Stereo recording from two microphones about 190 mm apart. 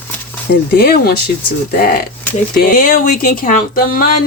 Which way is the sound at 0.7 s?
55° left (ahead or behind).